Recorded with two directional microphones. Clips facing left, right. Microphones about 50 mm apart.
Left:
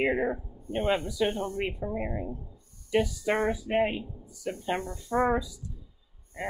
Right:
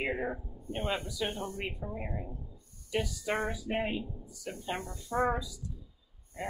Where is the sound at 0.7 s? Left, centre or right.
Left.